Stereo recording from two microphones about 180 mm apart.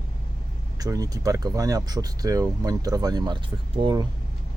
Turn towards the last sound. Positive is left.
turn(degrees=-25)  # may be behind; listen again after turning